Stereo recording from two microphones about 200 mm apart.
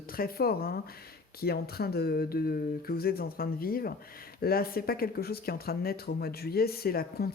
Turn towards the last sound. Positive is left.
turn(degrees=50)  # may be behind; listen again after turning